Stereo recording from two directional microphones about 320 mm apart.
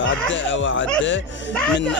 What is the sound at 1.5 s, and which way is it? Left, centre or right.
Speech, centre.